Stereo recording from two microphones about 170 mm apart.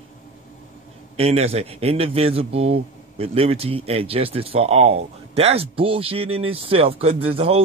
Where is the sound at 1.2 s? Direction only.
35° right (ahead or behind).